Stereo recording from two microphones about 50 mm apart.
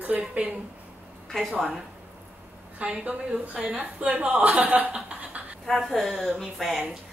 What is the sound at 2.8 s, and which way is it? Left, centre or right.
A woman's voice, right.